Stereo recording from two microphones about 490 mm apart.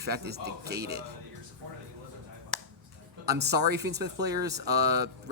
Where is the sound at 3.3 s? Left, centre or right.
Centre.